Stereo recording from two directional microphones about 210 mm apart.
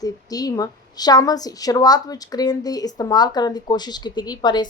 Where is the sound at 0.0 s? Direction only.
15° left (ahead or behind).